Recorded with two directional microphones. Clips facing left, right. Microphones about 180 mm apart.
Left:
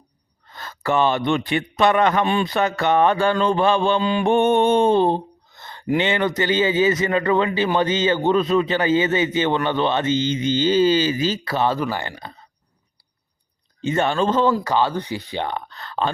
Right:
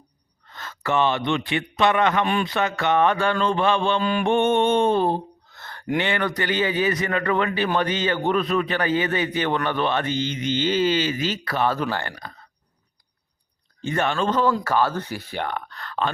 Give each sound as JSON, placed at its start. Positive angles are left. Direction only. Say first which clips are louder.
{"t": 0.5, "sound": "a man's voice", "louder": "left 2 dB", "side_deg": 35}
{"t": 4.0, "sound": "a man's voice", "louder": "left 2 dB", "side_deg": 20}
{"t": 4.3, "sound": "a man's voice", "louder": "left 3 dB", "side_deg": 40}
{"t": 11.8, "sound": "speech", "louder": "left 1 dB", "side_deg": 10}
{"t": 12.1, "sound": "a man's voice", "louder": "left 2 dB", "side_deg": 25}
{"t": 13.8, "sound": "a man's voice", "louder": "left 3 dB", "side_deg": 25}
{"t": 14.6, "sound": "a man's voice", "louder": "left 1 dB", "side_deg": 15}